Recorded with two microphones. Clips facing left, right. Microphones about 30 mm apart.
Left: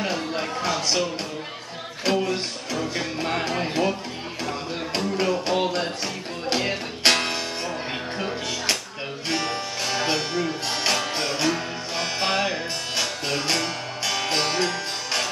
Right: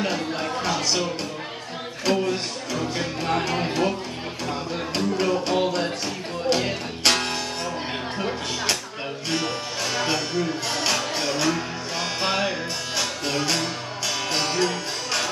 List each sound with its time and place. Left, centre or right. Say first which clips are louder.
0.0 s speech: right 1 dB; centre
2.0 s speech: even; centre
4.9 s music: even; centre
5.3 s speech: right 1 dB; centre
6.5 s music: even; centre
9.3 s music: left 1 dB; centre